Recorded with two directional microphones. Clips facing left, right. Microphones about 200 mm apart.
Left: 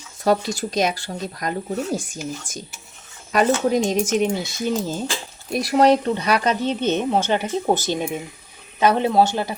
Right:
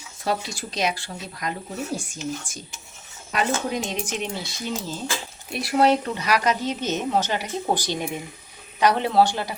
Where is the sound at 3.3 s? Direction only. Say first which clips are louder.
Left 7 dB; 45° left (ahead or behind); by 7.8 s 25° left (ahead or behind).